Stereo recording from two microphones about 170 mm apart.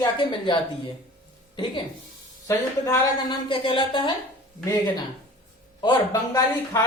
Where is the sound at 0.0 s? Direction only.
30° left (ahead or behind).